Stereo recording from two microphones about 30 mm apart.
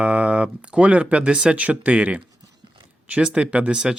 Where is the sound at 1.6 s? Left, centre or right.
Right.